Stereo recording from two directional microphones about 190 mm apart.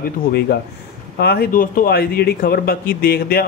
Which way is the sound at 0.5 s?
55° left (ahead or behind).